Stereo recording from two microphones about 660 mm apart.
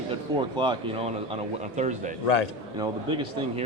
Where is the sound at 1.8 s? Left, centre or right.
Centre.